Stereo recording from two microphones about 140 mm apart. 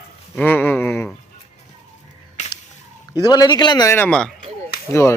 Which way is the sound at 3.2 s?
30° left (ahead or behind).